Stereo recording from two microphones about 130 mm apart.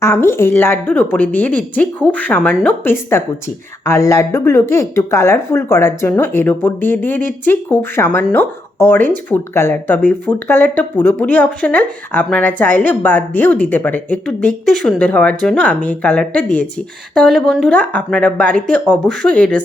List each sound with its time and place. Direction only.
0.0 s speech: 20° left (ahead or behind)